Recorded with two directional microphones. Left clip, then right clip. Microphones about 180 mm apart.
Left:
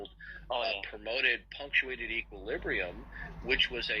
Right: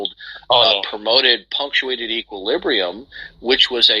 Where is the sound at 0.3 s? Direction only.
50° right (ahead or behind).